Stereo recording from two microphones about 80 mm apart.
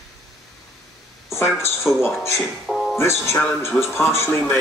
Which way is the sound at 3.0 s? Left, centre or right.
Left.